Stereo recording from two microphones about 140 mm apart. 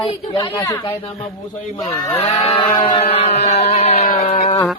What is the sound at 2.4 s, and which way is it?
Speech, 45° left (ahead or behind).